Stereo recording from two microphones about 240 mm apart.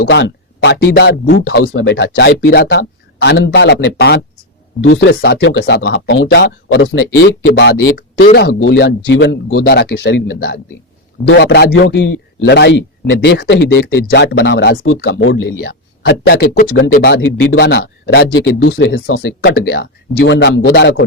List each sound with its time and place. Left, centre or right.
0.0 s a man's voice: left
1.5 s a man's voice: left